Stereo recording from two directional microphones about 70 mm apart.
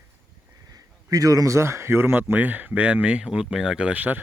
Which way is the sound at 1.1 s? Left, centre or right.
Right.